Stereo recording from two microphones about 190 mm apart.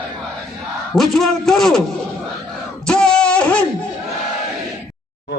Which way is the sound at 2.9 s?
5° left (ahead or behind).